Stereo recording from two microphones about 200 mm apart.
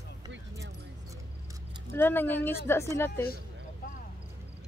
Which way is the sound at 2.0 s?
10° left (ahead or behind).